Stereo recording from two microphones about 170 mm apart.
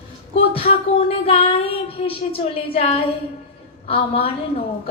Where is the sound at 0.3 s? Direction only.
35° left (ahead or behind).